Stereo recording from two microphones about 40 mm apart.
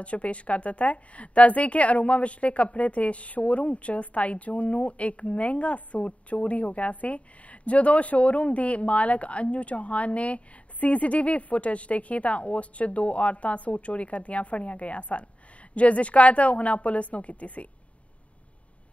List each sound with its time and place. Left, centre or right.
0.0 s a woman's voice: left